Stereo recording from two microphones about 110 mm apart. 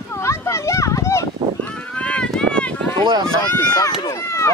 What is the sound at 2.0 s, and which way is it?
Run, 10° left (ahead or behind).